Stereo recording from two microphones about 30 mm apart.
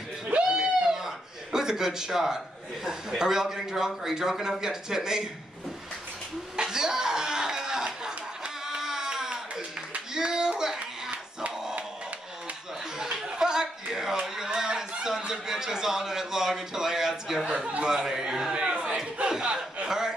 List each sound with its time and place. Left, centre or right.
0.5 s a sound: right
0.9 s a man's voice: centre
6.5 s a sound: right
10.1 s a child's voice: right
13.0 s chuckle: centre
14.2 s a sound: centre
15.0 s a man's voice: centre
17.5 s speech: right
17.8 s speech: centre
18.5 s a sound: right
19.4 s chuckle: right
19.9 s chuckle: right